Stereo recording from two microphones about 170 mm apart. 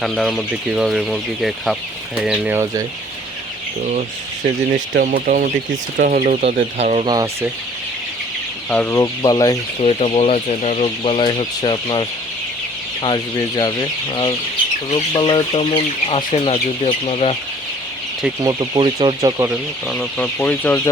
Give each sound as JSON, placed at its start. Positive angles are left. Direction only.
{"t": 0.0, "sound": "speech", "side_deg": 0}
{"t": 4.7, "sound": "speech", "side_deg": -60}
{"t": 7.0, "sound": "speech", "side_deg": -25}
{"t": 8.7, "sound": "speech", "side_deg": 10}
{"t": 9.8, "sound": "speech", "side_deg": 35}
{"t": 14.8, "sound": "speech", "side_deg": 35}
{"t": 18.4, "sound": "speech", "side_deg": -25}
{"t": 19.9, "sound": "speech", "side_deg": 5}